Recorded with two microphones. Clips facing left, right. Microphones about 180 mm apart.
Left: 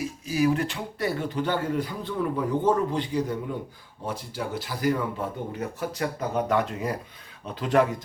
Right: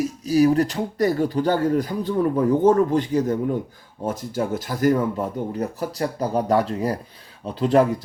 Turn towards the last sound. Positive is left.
turn(degrees=-30)  # may be behind; listen again after turning